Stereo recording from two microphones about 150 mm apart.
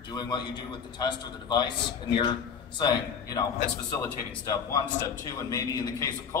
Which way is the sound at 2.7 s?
25° left (ahead or behind).